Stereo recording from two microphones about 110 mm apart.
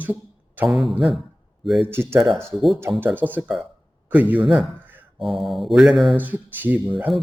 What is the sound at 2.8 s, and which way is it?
Speech, 15° right (ahead or behind).